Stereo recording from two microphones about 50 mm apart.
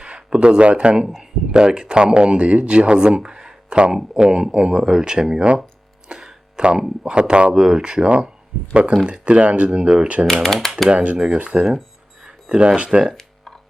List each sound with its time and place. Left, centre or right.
0.0 s speech: centre
6.1 s a sound: centre
6.8 s speech: centre
10.2 s speech: centre
10.8 s speech: right